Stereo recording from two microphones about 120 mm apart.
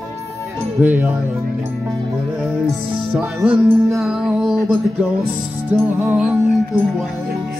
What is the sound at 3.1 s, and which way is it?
Music, 15° right (ahead or behind).